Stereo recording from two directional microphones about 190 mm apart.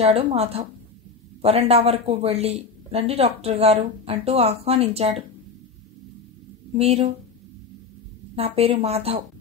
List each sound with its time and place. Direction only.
0.0 s speech: 35° right (ahead or behind)
6.8 s speech: 35° right (ahead or behind)
8.4 s speech: 30° right (ahead or behind)